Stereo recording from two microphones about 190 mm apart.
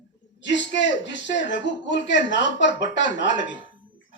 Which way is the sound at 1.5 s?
70° left (ahead or behind).